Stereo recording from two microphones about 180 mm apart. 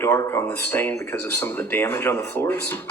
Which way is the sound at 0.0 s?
15° left (ahead or behind).